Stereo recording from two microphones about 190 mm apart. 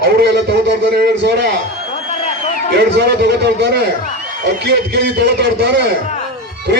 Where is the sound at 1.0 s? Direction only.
60° right (ahead or behind).